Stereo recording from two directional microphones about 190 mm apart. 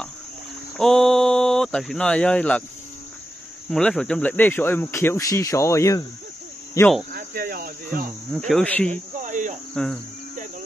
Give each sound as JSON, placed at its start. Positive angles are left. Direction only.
{"t": 0.7, "sound": "speech", "side_deg": 0}
{"t": 3.7, "sound": "speech", "side_deg": 5}
{"t": 7.1, "sound": "cricket", "side_deg": -50}
{"t": 8.3, "sound": "cricket", "side_deg": 0}
{"t": 8.9, "sound": "cricket", "side_deg": -40}